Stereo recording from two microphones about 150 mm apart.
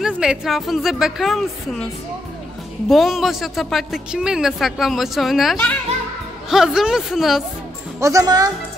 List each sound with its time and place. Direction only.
0.0 s a woman's voice: 5° right (ahead or behind)
2.9 s a woman's voice: centre (ahead or behind)
8.0 s a child's voice: 20° right (ahead or behind)